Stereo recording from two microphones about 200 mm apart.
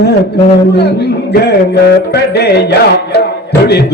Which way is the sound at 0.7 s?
55° left (ahead or behind).